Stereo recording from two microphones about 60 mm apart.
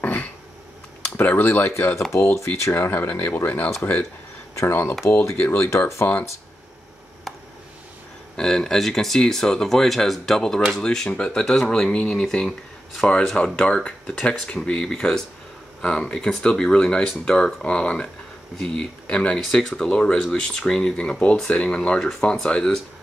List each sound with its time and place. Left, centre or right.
0.0 s throat clearing: left
1.1 s speech: left
2.9 s speech: left
4.6 s speech: left
5.0 s speech: left
8.4 s speech: centre
19.3 s speech: centre